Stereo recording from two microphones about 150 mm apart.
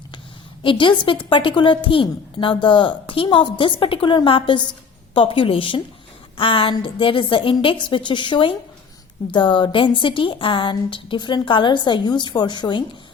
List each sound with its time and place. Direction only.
0.6 s a woman's voice: 35° left (ahead or behind)